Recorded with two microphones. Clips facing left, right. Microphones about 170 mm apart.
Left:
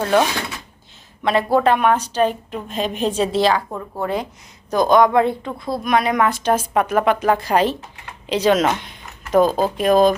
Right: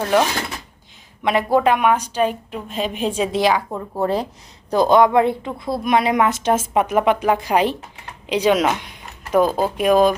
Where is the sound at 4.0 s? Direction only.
35° right (ahead or behind).